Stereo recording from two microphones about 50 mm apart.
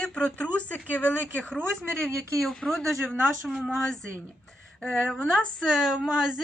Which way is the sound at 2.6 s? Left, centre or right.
Centre.